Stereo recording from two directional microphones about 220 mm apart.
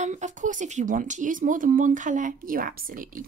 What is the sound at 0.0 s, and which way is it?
Speech, 35° right (ahead or behind).